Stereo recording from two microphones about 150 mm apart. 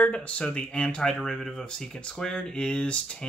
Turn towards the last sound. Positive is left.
turn(degrees=5)  # may be behind; listen again after turning